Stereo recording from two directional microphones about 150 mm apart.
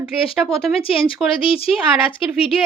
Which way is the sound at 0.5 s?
35° left (ahead or behind).